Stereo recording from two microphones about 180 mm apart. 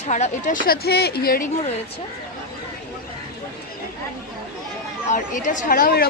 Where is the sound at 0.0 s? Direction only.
40° left (ahead or behind).